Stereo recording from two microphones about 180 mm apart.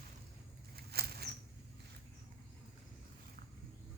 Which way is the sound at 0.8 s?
60° right (ahead or behind).